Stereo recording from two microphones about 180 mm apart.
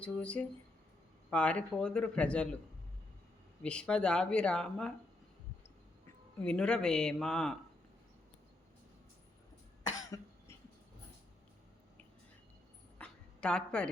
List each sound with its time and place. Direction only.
0.0 s speech: 5° left (ahead or behind)
3.6 s speech: 5° left (ahead or behind)
6.4 s speech: 5° left (ahead or behind)
10.1 s cough: 20° left (ahead or behind)
13.0 s a sound: 5° left (ahead or behind)